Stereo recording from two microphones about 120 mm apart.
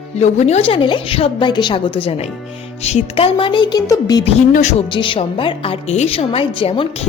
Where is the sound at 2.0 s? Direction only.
55° left (ahead or behind); by 4.2 s 30° left (ahead or behind).